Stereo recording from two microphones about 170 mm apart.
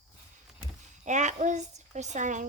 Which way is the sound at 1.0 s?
45° right (ahead or behind).